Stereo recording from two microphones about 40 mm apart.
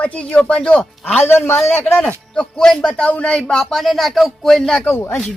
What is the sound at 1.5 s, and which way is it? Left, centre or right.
Speech, left.